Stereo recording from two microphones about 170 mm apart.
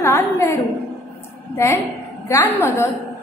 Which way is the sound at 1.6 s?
15° left (ahead or behind).